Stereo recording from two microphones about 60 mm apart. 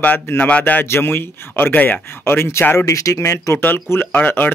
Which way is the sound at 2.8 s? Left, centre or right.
Left.